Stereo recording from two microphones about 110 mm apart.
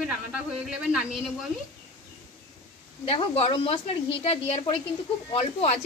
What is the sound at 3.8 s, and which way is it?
Speech, 70° left (ahead or behind).